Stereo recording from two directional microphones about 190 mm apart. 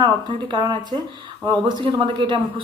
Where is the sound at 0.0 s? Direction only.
25° right (ahead or behind).